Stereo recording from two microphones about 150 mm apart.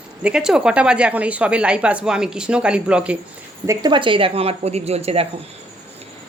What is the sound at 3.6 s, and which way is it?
A woman's voice, 30° right (ahead or behind).